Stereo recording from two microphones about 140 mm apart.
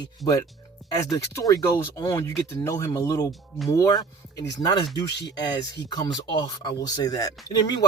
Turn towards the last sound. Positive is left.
turn(degrees=30)  # may be behind; listen again after turning